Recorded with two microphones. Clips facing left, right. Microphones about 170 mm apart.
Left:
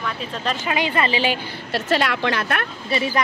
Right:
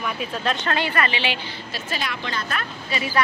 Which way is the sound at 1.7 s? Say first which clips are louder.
Left 10 dB; 70° left (ahead or behind).